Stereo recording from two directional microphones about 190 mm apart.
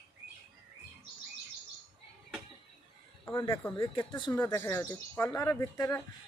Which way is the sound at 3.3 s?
25° left (ahead or behind).